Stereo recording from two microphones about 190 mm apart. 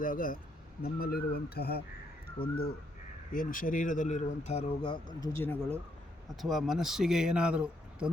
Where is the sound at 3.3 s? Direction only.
45° left (ahead or behind); by 5.0 s 30° left (ahead or behind).